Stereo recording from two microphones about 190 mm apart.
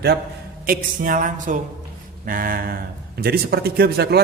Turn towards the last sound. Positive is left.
turn(degrees=-55)  # may be behind; listen again after turning